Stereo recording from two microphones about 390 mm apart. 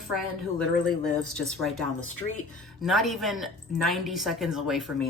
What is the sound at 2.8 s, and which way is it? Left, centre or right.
A woman's voice, centre.